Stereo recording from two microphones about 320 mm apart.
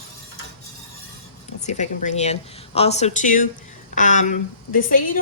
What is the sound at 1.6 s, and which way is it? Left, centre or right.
Speech, left.